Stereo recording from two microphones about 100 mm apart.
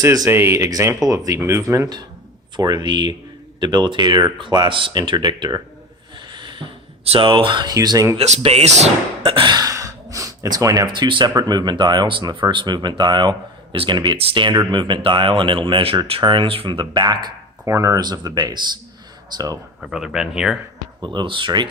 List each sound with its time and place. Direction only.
0.0 s speech: 35° right (ahead or behind)
0.3 s speech: 25° right (ahead or behind)
2.6 s speech: 45° right (ahead or behind)
6.1 s a sound: 50° right (ahead or behind)
7.0 s speech: 65° right (ahead or behind); by 8.1 s 35° right (ahead or behind)
8.4 s speech: 90° right; by 9.6 s 60° right (ahead or behind)
9.6 s gasp: 35° right (ahead or behind)
10.8 s speech: 50° right (ahead or behind)
14.2 s speech: 60° right (ahead or behind); by 17.3 s 45° right (ahead or behind)
17.7 s speech: 35° right (ahead or behind)
19.8 s speech: 5° right (ahead or behind)
21.0 s speech: 50° right (ahead or behind)